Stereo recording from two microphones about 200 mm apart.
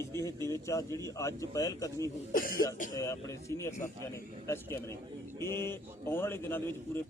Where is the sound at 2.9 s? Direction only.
15° left (ahead or behind).